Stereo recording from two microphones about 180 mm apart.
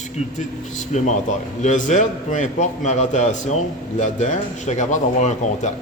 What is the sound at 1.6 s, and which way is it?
A man's voice, 45° left (ahead or behind).